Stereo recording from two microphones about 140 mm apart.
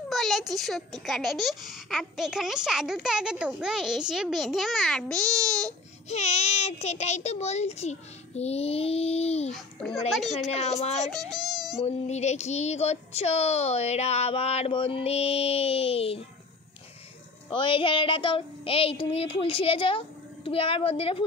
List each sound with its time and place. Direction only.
0.1 s a child's voice: centre (ahead or behind)
6.0 s speech: 50° left (ahead or behind)
9.5 s a child's voice: centre (ahead or behind)
10.5 s speech: 50° left (ahead or behind)
11.2 s a child's voice: centre (ahead or behind)
11.8 s speech: 55° left (ahead or behind)
17.5 s speech: 35° left (ahead or behind)